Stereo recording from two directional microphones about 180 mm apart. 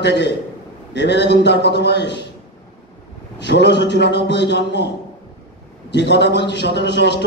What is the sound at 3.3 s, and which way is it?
A man's voice, 70° left (ahead or behind).